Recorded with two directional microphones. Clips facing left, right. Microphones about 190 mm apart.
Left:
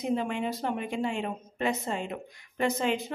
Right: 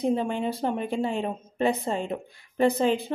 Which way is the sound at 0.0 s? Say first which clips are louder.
Right 4 dB; 30° right (ahead or behind).